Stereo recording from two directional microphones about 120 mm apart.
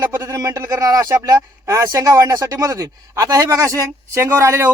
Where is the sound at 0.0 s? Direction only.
25° right (ahead or behind).